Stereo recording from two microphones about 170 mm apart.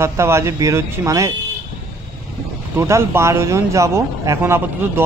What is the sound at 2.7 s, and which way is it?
Speech, 15° right (ahead or behind).